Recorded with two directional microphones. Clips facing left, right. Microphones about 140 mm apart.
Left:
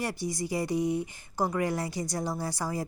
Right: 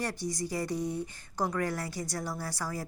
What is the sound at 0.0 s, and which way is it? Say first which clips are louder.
A woman's voice: left 2 dB; 10° left (ahead or behind).